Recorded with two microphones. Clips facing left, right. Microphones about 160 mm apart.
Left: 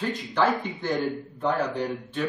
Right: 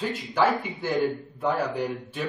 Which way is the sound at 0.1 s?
10° right (ahead or behind).